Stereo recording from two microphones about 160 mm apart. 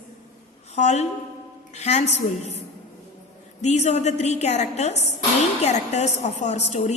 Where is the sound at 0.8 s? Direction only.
45° left (ahead or behind).